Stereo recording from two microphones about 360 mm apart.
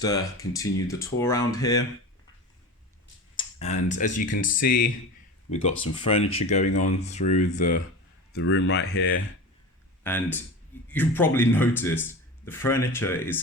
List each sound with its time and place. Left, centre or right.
0.0 s speech: centre
3.3 s clicking: centre
3.9 s speech: centre
10.0 s speech: centre